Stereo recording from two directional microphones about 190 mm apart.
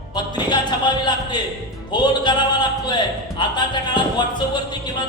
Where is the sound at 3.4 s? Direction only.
25° left (ahead or behind).